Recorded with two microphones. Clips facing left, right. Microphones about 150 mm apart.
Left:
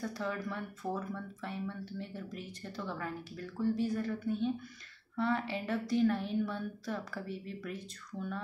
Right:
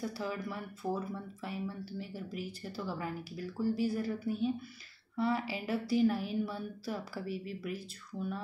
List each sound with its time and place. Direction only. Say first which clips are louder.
0.0 s speech: even; 5° right (ahead or behind)